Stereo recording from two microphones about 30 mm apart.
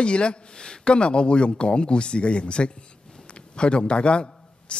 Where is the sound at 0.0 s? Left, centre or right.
Left.